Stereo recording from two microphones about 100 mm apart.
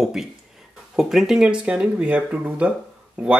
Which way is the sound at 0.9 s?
5° right (ahead or behind).